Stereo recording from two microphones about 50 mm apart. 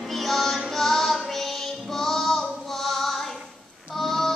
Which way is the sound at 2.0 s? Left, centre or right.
Centre.